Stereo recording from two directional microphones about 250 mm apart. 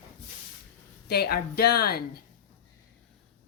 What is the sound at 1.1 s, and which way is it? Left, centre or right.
Speech, left.